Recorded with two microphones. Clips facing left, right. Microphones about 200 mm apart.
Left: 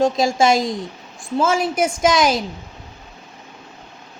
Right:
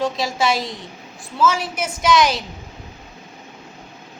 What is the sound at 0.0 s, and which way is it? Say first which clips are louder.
Speech: left 5 dB; 45° left (ahead or behind).